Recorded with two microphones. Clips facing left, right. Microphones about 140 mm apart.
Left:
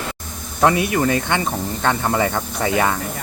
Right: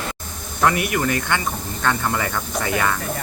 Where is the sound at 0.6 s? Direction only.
25° left (ahead or behind).